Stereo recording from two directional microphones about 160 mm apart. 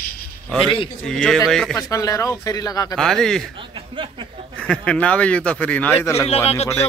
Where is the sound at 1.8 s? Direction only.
20° left (ahead or behind).